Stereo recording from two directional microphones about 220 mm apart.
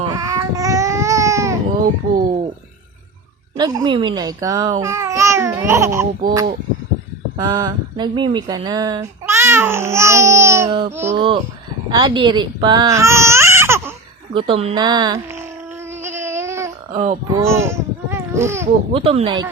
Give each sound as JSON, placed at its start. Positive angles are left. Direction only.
{"t": 0.0, "sound": "baby cry", "side_deg": -15}
{"t": 3.6, "sound": "speech", "side_deg": -15}
{"t": 10.7, "sound": "a woman's voice", "side_deg": -25}
{"t": 14.3, "sound": "a woman's voice", "side_deg": -25}
{"t": 16.1, "sound": "a sound", "side_deg": -10}
{"t": 17.3, "sound": "babbling", "side_deg": -10}
{"t": 18.9, "sound": "a woman's voice", "side_deg": -25}